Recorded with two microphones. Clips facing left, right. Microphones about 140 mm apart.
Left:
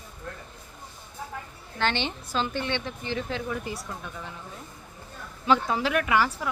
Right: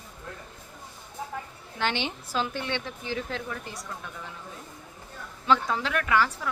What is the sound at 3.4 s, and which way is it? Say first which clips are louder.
Speech: left 5 dB; 10° left (ahead or behind).